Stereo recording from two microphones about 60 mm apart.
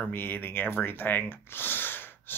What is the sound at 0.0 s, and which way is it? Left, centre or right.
Speech, left.